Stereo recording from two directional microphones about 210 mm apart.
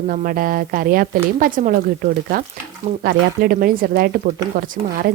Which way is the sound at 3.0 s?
45° right (ahead or behind).